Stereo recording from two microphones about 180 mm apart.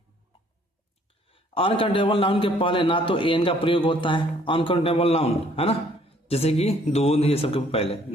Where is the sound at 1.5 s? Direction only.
30° left (ahead or behind).